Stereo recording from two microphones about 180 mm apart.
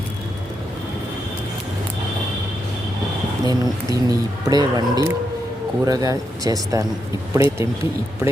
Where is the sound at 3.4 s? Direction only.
20° right (ahead or behind).